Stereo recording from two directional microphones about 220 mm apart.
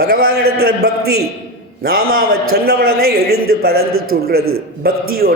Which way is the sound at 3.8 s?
70° right (ahead or behind).